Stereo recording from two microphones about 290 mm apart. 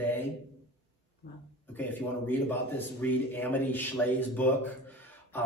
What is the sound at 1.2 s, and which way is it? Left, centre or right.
Speech, left.